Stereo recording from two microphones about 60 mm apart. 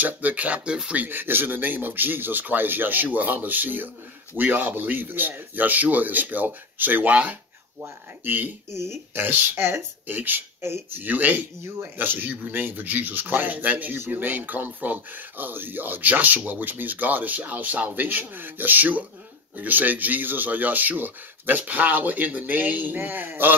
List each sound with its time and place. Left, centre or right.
0.0 s speech: right
0.9 s speech: right
8.7 s speech: right
10.1 s speech: right